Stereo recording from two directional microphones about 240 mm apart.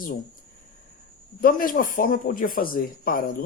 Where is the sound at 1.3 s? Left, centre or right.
Left.